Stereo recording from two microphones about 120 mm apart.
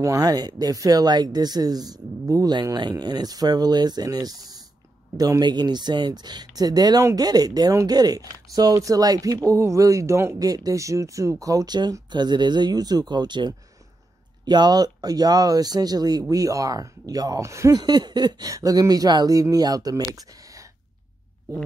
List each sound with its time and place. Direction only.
0.0 s speech: 30° right (ahead or behind)